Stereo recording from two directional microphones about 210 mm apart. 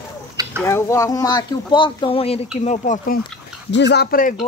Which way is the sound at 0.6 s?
15° left (ahead or behind).